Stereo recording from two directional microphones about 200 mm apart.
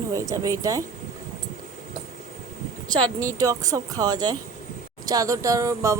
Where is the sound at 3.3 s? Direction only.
15° right (ahead or behind).